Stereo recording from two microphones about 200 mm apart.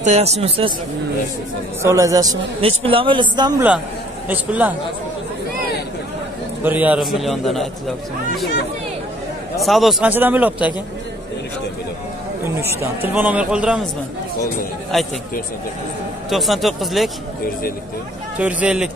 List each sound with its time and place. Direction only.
0.0 s speech: 35° right (ahead or behind)
1.8 s a man's voice: 15° right (ahead or behind)
2.6 s speech: 30° right (ahead or behind)
4.3 s a man's voice: 10° right (ahead or behind)
6.6 s a man's voice: 10° right (ahead or behind)
9.6 s a man's voice: centre (ahead or behind)
12.4 s a man's voice: 10° right (ahead or behind)
14.9 s a man's voice: centre (ahead or behind)
16.3 s a man's voice: centre (ahead or behind)
18.4 s a man's voice: 5° right (ahead or behind)